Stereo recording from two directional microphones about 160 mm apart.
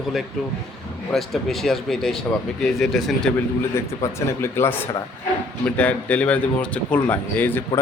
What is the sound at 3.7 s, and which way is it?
A man's voice, 15° left (ahead or behind).